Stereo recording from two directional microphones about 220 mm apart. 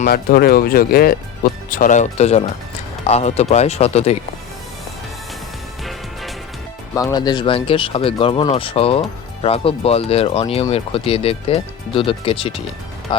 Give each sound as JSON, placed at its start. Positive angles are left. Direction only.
{"t": 0.0, "sound": "speech", "side_deg": 40}
{"t": 6.9, "sound": "speech", "side_deg": 15}